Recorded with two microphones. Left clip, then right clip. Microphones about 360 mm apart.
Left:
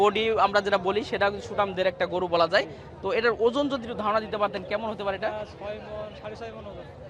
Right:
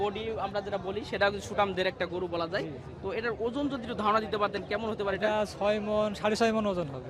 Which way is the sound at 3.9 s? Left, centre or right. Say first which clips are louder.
Right 3 dB; centre.